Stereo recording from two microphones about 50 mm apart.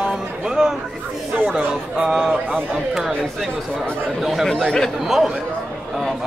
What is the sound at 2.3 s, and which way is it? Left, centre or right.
Speech, right.